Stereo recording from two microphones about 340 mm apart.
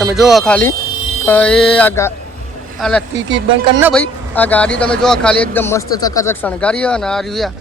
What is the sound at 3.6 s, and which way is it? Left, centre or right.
Speech, centre.